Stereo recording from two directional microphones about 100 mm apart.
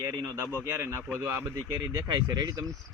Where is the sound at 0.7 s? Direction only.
25° right (ahead or behind).